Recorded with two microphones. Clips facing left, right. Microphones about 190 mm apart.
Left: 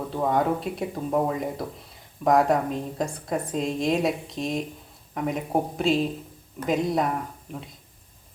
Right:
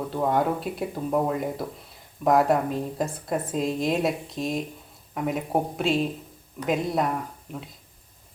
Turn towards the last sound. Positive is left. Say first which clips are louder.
# even
turn(degrees=0)  # may be behind; listen again after turning